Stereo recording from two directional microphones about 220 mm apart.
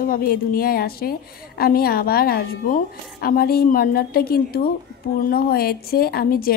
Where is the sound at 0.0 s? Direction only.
40° left (ahead or behind).